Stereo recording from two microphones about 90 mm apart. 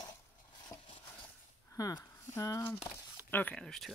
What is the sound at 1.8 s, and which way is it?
Speech, 40° left (ahead or behind).